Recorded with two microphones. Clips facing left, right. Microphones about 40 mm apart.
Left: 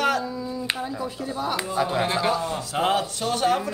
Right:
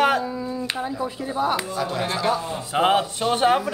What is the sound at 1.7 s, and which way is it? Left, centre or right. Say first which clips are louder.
Speech: left 2 dB; centre.